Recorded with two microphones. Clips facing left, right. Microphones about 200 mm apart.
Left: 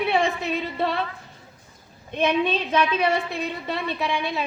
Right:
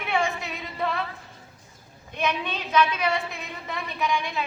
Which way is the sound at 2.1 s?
30° left (ahead or behind).